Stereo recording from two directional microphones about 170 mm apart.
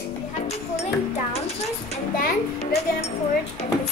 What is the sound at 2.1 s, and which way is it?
Music, 60° left (ahead or behind).